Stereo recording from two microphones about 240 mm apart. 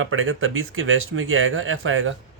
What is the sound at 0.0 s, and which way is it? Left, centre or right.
Speech, right.